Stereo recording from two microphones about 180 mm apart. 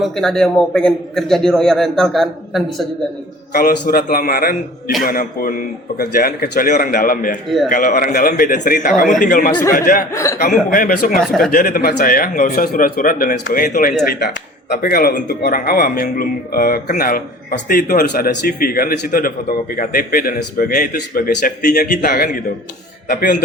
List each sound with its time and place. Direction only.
0.0 s a man's voice: centre (ahead or behind)
3.5 s speech: 50° left (ahead or behind)
10.1 s speech: 15° left (ahead or behind)
10.3 s speech: 55° left (ahead or behind)
11.2 s a man's voice: 5° left (ahead or behind)
11.5 s speech: 50° left (ahead or behind)